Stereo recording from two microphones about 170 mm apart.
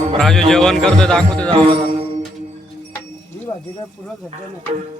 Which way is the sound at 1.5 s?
30° right (ahead or behind).